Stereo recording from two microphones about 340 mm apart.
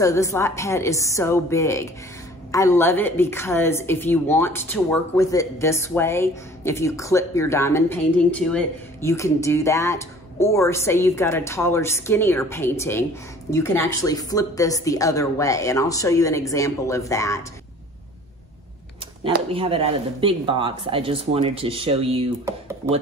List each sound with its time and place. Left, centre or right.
0.0 s speech: centre
19.5 s speech: centre